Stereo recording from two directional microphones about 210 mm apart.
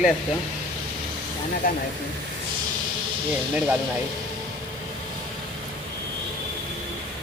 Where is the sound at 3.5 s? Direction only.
5° right (ahead or behind).